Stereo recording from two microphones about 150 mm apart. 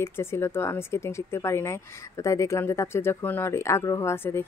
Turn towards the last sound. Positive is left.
turn(degrees=15)  # may be behind; listen again after turning